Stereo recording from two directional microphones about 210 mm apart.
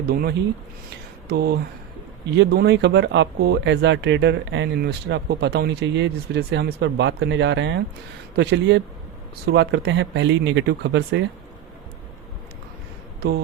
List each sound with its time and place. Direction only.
0.1 s speech: 45° right (ahead or behind)